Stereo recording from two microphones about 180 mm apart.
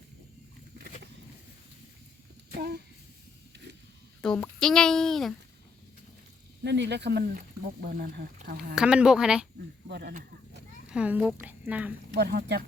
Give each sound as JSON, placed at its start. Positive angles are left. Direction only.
{"t": 4.2, "sound": "speech", "side_deg": 5}
{"t": 6.7, "sound": "speech", "side_deg": -70}
{"t": 7.8, "sound": "speech", "side_deg": -55}
{"t": 8.7, "sound": "speech", "side_deg": -5}
{"t": 9.9, "sound": "speech", "side_deg": -60}
{"t": 10.9, "sound": "a woman's voice", "side_deg": -5}
{"t": 12.1, "sound": "speech", "side_deg": -60}